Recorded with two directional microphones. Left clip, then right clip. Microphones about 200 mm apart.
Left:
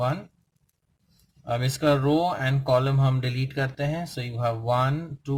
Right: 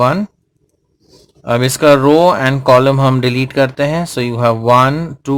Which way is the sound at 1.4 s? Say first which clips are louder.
Right 14 dB; 45° right (ahead or behind).